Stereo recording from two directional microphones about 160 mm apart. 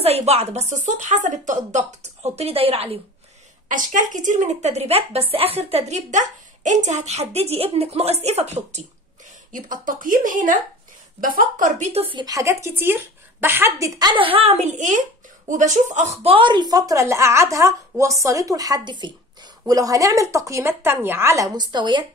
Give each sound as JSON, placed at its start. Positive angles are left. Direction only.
{"t": 0.0, "sound": "a woman's voice", "side_deg": -40}
{"t": 3.6, "sound": "a woman's voice", "side_deg": -55}
{"t": 9.5, "sound": "speech", "side_deg": -55}
{"t": 11.9, "sound": "speech", "side_deg": -35}